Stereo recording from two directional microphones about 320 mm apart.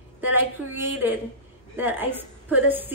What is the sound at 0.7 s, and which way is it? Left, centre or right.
A woman's voice, centre.